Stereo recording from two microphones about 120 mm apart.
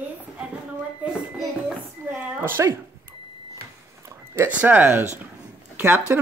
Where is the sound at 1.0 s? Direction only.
10° right (ahead or behind).